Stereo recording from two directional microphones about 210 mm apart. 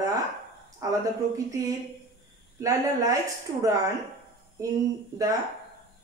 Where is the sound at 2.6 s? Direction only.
15° right (ahead or behind).